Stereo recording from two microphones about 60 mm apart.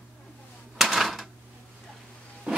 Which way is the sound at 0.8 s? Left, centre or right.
Centre.